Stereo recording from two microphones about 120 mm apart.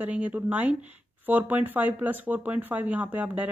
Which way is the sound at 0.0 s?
10° right (ahead or behind).